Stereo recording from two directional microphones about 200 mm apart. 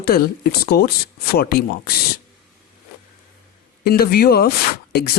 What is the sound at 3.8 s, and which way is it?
Speech, 50° left (ahead or behind).